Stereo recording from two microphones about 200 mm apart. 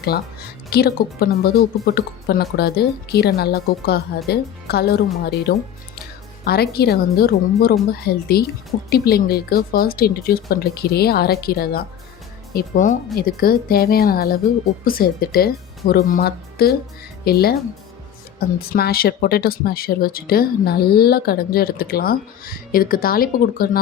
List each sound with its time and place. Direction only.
0.0 s speech: 50° left (ahead or behind)